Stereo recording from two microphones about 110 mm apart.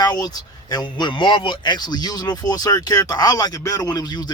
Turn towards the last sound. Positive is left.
turn(degrees=40)  # may be behind; listen again after turning